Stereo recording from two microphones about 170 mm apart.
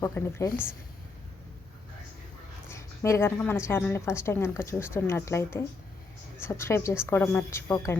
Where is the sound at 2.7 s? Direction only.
15° left (ahead or behind).